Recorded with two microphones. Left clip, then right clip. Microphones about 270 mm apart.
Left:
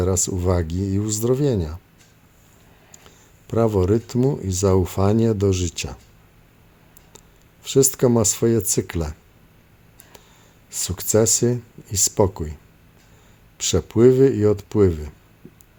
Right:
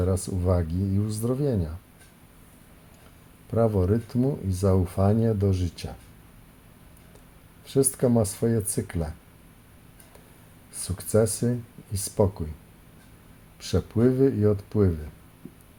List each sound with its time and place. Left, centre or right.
0.0 s speech: left
3.4 s speech: left
7.6 s speech: left
10.8 s speech: left
13.6 s speech: left